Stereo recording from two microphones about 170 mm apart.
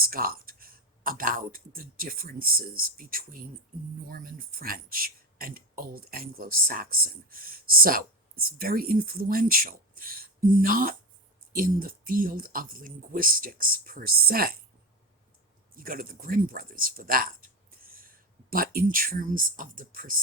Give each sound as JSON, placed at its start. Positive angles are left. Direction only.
{"t": 0.0, "sound": "a man's voice", "side_deg": -60}
{"t": 15.7, "sound": "speech", "side_deg": -55}